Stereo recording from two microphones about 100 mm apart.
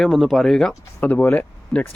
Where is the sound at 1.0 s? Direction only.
15° left (ahead or behind).